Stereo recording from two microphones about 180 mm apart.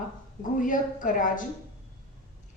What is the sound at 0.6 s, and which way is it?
Speech, 50° left (ahead or behind).